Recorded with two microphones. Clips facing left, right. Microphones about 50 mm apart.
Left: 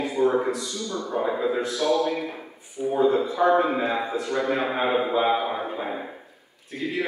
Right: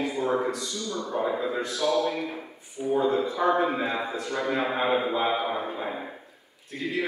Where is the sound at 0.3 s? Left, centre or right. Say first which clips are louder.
Left 2 dB; centre.